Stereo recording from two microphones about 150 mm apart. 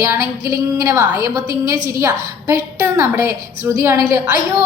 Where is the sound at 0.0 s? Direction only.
20° right (ahead or behind).